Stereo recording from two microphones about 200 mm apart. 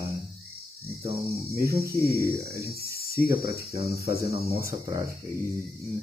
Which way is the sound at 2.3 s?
15° right (ahead or behind).